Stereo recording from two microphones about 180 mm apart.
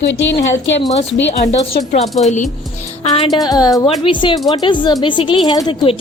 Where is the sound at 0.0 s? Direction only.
80° left.